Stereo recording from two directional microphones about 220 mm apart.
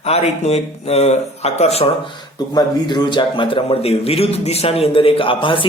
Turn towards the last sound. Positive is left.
turn(degrees=25)  # may be behind; listen again after turning